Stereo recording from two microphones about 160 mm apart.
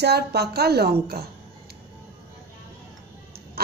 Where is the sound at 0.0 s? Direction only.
90° right.